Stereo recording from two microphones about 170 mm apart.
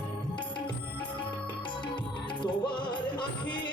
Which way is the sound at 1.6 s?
25° left (ahead or behind).